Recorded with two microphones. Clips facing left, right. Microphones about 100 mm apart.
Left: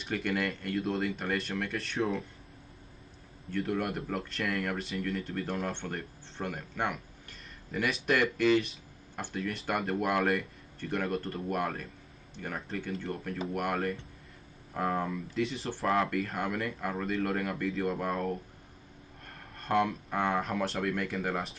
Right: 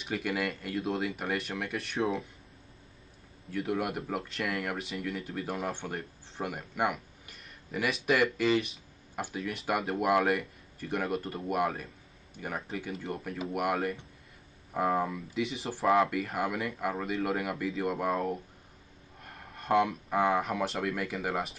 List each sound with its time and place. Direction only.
0.0 s speech: 5° right (ahead or behind)
3.4 s speech: 5° right (ahead or behind)